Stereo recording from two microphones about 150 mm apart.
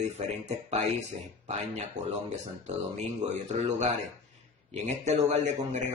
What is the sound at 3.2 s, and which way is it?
Speech, 45° right (ahead or behind).